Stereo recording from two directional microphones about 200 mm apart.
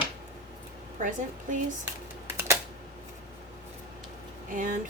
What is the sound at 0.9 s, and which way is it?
Speech, 40° right (ahead or behind).